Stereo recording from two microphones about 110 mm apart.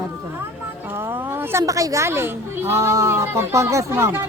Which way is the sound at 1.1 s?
20° right (ahead or behind).